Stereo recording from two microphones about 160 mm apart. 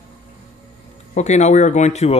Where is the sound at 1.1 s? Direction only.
45° left (ahead or behind).